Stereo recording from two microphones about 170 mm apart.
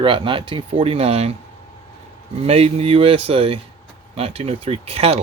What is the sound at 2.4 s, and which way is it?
Speech, 35° right (ahead or behind).